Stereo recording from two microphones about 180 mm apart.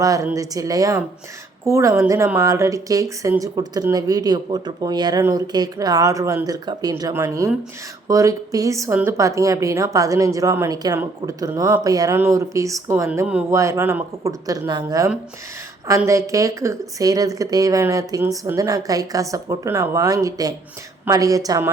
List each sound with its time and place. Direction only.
0.0 s a woman's voice: 20° right (ahead or behind)